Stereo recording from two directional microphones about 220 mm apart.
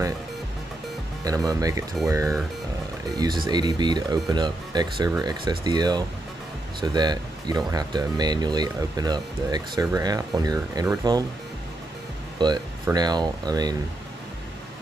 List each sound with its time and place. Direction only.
1.2 s speech: 15° right (ahead or behind)
12.4 s speech: 20° right (ahead or behind)